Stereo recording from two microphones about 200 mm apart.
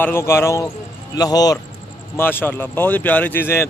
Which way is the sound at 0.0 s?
10° left (ahead or behind).